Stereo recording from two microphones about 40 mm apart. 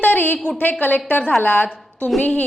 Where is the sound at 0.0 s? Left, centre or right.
Left.